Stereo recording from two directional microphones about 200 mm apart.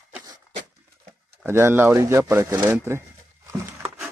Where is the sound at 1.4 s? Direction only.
10° right (ahead or behind).